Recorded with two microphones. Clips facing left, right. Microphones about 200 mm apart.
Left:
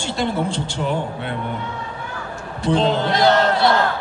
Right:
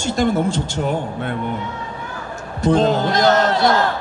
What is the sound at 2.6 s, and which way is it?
Speech, 45° right (ahead or behind).